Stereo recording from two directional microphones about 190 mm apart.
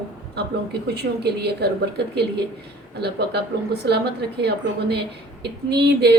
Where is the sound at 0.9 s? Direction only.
60° right (ahead or behind).